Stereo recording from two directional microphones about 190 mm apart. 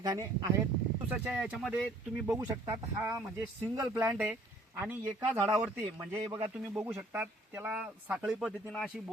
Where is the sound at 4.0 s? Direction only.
10° right (ahead or behind).